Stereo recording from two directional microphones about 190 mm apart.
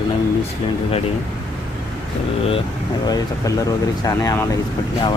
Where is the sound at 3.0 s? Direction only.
20° left (ahead or behind).